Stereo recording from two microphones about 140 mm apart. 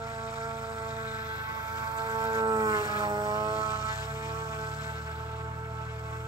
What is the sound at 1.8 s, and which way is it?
Music, 30° right (ahead or behind).